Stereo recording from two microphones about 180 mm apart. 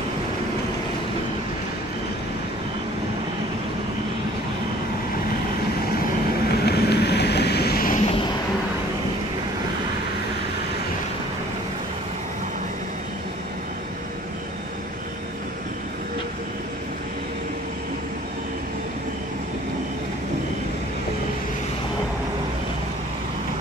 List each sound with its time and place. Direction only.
6.5 s vehicle: 65° left (ahead or behind)